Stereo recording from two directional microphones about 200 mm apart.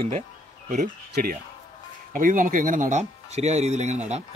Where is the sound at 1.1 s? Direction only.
50° right (ahead or behind).